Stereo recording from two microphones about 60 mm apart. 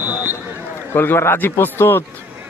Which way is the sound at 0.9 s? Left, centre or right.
Left.